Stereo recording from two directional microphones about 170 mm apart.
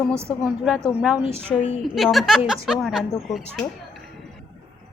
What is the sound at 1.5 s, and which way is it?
Speech, 10° left (ahead or behind).